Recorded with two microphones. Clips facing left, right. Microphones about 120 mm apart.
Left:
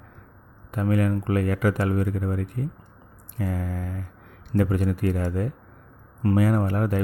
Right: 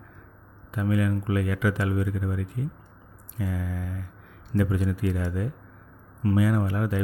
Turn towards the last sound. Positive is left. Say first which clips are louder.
# left 3 dB
turn(degrees=50)  # may be behind; listen again after turning